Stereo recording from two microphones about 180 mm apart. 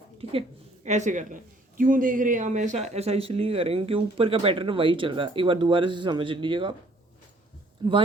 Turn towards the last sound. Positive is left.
turn(degrees=-25)  # may be behind; listen again after turning